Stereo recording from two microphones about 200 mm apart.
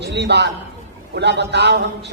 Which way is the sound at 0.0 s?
55° right (ahead or behind).